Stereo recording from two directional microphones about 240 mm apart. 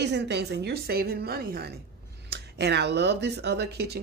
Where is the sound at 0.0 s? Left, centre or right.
Right.